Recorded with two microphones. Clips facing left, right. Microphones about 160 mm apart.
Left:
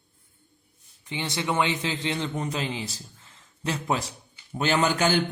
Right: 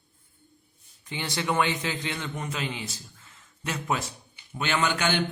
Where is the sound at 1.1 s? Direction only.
20° left (ahead or behind).